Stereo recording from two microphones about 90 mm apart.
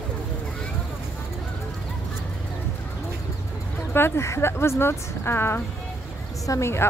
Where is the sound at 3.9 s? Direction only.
25° left (ahead or behind).